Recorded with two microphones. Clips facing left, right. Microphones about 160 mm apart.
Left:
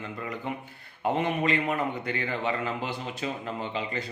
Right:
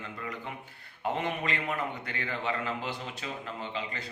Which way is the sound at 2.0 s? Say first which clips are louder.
Left 4 dB; 15° left (ahead or behind).